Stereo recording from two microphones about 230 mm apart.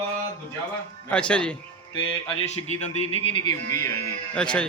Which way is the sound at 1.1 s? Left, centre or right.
Centre.